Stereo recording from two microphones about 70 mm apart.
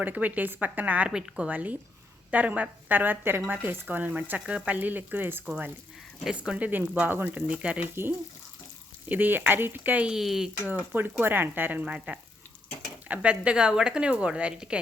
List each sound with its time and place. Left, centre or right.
0.0 s a woman's voice: right
6.3 s a woman's voice: centre
6.7 s a woman's voice: right
9.0 s a woman's voice: right
10.1 s a woman's voice: centre
10.9 s a woman's voice: right; by 14.8 s centre